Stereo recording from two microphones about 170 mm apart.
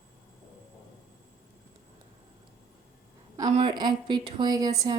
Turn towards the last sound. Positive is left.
turn(degrees=-20)  # may be behind; listen again after turning